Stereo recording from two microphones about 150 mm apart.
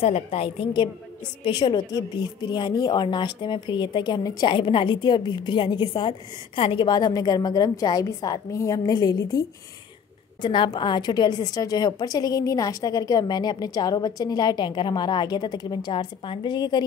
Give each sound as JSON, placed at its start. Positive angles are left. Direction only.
{"t": 0.0, "sound": "a woman's voice", "side_deg": 40}
{"t": 10.4, "sound": "speech", "side_deg": 30}